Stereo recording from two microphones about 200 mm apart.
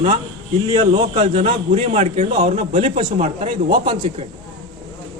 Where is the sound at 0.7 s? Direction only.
25° right (ahead or behind).